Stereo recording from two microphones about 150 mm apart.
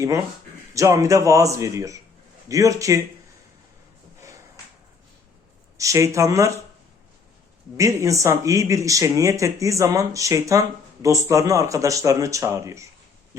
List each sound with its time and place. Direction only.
0.7 s speech: 20° right (ahead or behind)
5.7 s speech: 20° right (ahead or behind)
7.8 s speech: 20° right (ahead or behind)